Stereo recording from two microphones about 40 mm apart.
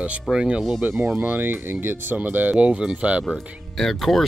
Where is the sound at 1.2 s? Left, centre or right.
Right.